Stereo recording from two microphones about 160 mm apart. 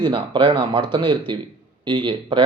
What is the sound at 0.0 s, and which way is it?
Speech, 30° right (ahead or behind).